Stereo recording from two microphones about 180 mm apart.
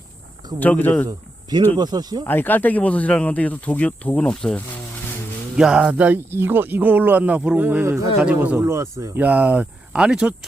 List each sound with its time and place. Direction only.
0.6 s speech: 10° left (ahead or behind)
1.0 s speech: 20° right (ahead or behind)
2.2 s speech: 10° left (ahead or behind); by 10.3 s 5° right (ahead or behind)